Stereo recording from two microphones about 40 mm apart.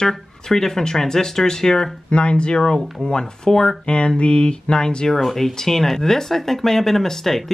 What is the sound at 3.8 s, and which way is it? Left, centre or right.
Speech, left.